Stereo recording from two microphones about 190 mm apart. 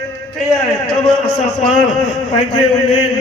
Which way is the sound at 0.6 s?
35° left (ahead or behind).